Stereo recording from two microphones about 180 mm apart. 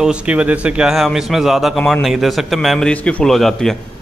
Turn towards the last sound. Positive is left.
turn(degrees=0)  # may be behind; listen again after turning